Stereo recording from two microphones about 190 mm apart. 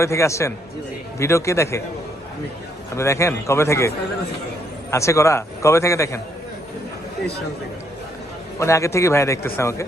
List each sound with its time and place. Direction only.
0.0 s a man's voice: 15° left (ahead or behind)
2.9 s a man's voice: 15° left (ahead or behind)
8.5 s a man's voice: 15° left (ahead or behind)